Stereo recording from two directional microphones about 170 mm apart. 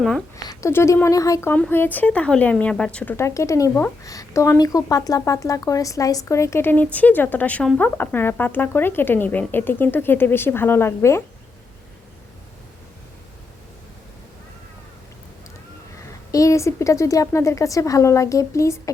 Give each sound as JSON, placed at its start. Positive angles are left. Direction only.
{"t": 0.4, "sound": "speech", "side_deg": 15}
{"t": 16.0, "sound": "speech", "side_deg": 20}